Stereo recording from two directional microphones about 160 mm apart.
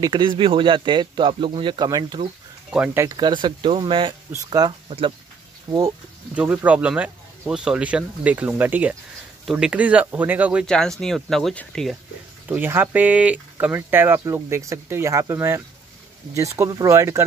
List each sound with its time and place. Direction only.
0.0 s speech: 30° right (ahead or behind)
2.7 s speech: 10° right (ahead or behind)
6.3 s speech: 10° right (ahead or behind)
10.7 s speech: 5° left (ahead or behind)
12.4 s speech: 10° right (ahead or behind)